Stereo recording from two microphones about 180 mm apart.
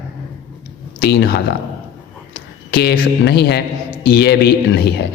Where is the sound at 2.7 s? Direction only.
60° left (ahead or behind).